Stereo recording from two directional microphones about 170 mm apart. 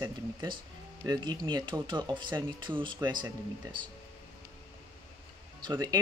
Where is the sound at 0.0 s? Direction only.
25° right (ahead or behind).